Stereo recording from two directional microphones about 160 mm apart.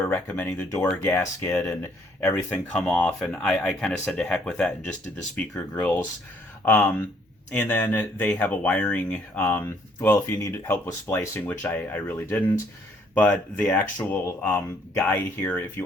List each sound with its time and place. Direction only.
0.1 s speech: 10° left (ahead or behind)
1.0 s speech: 20° left (ahead or behind)
13.1 s speech: 5° left (ahead or behind)